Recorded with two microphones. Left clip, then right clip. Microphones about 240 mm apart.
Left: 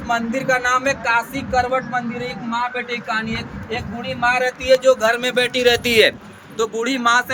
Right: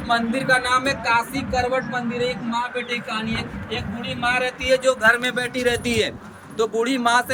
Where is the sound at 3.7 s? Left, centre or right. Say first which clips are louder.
Left 3 dB; centre.